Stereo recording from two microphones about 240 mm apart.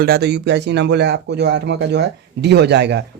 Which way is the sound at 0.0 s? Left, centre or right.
Right.